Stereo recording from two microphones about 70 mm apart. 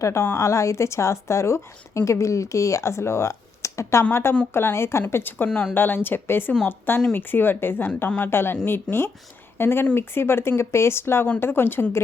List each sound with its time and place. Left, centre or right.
0.0 s speech: left